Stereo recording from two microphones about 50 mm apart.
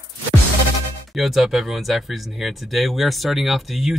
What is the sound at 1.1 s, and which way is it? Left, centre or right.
Speech, centre.